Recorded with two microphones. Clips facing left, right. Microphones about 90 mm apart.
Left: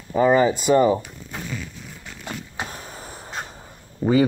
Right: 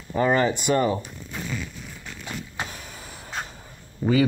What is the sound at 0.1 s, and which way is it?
Speech, 10° left (ahead or behind).